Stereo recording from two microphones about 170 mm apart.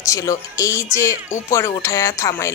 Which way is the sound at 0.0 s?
20° left (ahead or behind).